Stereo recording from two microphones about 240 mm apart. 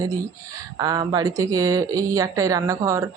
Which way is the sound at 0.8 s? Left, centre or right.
Centre.